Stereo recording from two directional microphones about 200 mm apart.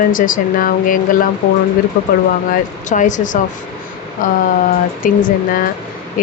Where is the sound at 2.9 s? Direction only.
40° left (ahead or behind).